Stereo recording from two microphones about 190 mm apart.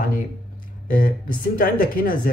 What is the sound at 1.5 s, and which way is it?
Speech, 50° left (ahead or behind).